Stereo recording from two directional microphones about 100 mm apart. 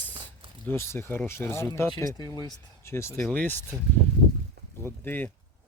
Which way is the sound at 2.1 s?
40° left (ahead or behind).